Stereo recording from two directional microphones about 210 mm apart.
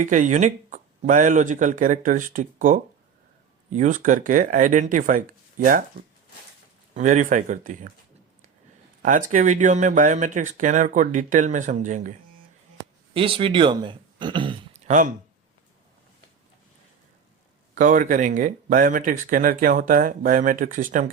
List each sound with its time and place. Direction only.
0.0 s speech: 35° right (ahead or behind)
6.9 s speech: 35° right (ahead or behind)
9.0 s speech: 40° right (ahead or behind)
13.1 s speech: 25° right (ahead or behind)
14.8 s speech: 40° right (ahead or behind)
17.7 s speech: 35° right (ahead or behind)